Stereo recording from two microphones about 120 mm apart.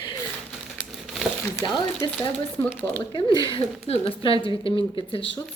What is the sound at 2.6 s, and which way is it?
Speech, 20° left (ahead or behind).